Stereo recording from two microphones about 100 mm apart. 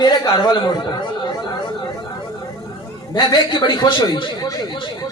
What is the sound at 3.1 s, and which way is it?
A man's voice, 45° left (ahead or behind).